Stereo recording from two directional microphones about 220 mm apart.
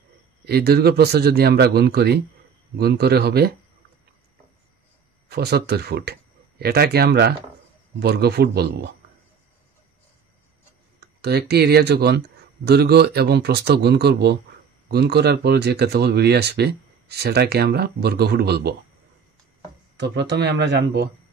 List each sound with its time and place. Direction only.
0.5 s speech: 45° right (ahead or behind)
5.3 s speech: 45° right (ahead or behind)
11.0 s speech: 50° right (ahead or behind)
20.0 s speech: 50° right (ahead or behind)